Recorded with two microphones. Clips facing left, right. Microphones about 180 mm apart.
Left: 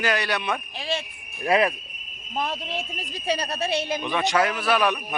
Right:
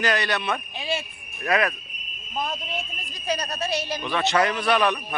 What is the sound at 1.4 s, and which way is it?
Speech, 30° left (ahead or behind).